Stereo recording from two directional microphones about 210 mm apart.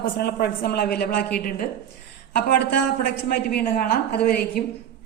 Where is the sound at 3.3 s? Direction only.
50° left (ahead or behind).